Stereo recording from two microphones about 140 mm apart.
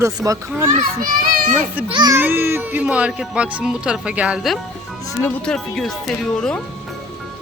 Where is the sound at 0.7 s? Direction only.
90° right.